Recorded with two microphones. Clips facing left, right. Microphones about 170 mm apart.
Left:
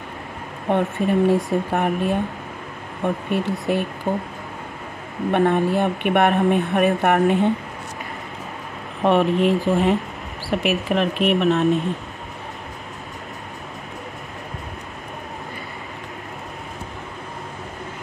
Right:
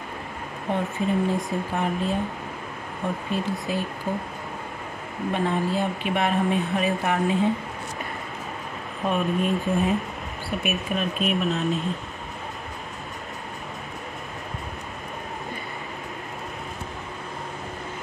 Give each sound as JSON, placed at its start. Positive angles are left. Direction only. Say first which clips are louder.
{"t": 0.7, "sound": "speech", "louder": "left 5 dB", "side_deg": 60}
{"t": 3.3, "sound": "speech", "louder": "left 5 dB", "side_deg": 65}
{"t": 5.3, "sound": "speech", "louder": "left 7 dB", "side_deg": 60}
{"t": 9.0, "sound": "speech", "louder": "left 7 dB", "side_deg": 80}